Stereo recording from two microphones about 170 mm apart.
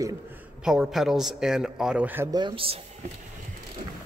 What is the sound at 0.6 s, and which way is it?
A man's voice, 5° right (ahead or behind).